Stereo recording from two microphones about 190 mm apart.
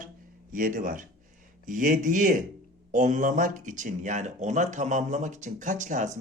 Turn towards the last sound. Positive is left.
turn(degrees=-40)  # may be behind; listen again after turning